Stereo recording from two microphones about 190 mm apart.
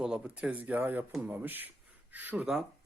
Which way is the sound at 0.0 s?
5° right (ahead or behind).